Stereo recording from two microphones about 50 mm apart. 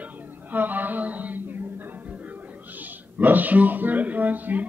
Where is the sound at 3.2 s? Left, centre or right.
Right.